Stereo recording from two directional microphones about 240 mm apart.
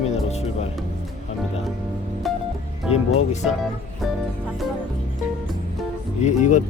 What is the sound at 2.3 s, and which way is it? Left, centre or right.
Music, centre.